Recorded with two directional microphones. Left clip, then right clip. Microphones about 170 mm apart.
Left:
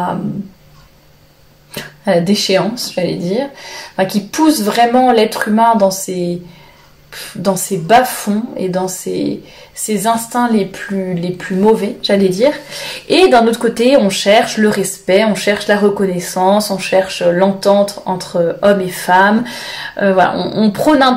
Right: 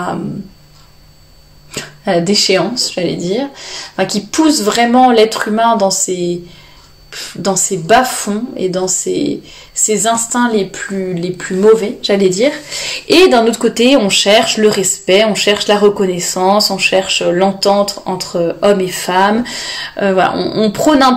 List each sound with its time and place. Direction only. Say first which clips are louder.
1.7 s speech: left 1 dB; 30° right (ahead or behind)
7.4 s speech: right 1 dB; 30° right (ahead or behind)